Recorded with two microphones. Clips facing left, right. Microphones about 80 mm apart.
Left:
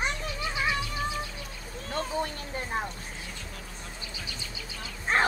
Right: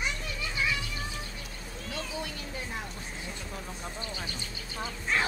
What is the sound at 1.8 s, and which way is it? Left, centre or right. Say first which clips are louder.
Vehicle: left 6 dB; left.